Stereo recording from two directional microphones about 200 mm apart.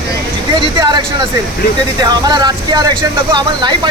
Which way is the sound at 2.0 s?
20° right (ahead or behind).